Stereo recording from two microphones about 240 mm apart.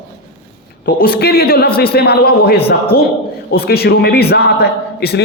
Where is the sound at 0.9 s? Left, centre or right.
Left.